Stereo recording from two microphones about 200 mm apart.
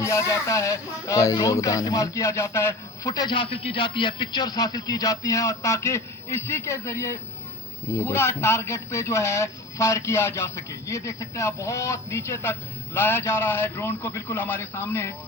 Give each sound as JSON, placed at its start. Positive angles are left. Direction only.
{"t": 0.0, "sound": "speech", "side_deg": 15}